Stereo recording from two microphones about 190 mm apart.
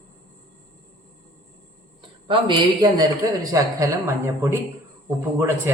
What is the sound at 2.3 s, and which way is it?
A man's voice, 25° right (ahead or behind).